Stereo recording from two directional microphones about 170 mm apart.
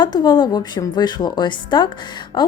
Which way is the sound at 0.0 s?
25° left (ahead or behind).